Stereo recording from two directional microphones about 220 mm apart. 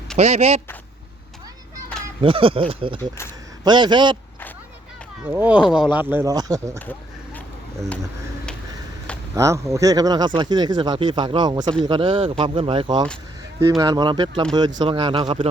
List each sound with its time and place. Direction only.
0.2 s speech: 30° right (ahead or behind)
2.2 s speech: 25° right (ahead or behind)
5.2 s speech: 5° right (ahead or behind)
9.3 s speech: 15° right (ahead or behind)